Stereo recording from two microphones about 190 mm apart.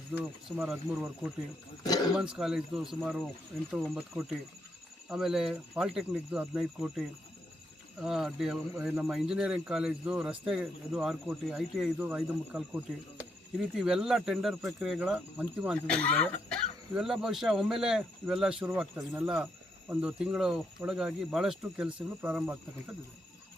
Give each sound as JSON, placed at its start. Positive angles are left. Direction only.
{"t": 0.1, "sound": "speech", "side_deg": -5}
{"t": 1.8, "sound": "speech", "side_deg": 20}
{"t": 2.1, "sound": "speech", "side_deg": -5}
{"t": 8.0, "sound": "speech", "side_deg": 0}
{"t": 15.9, "sound": "speech", "side_deg": 5}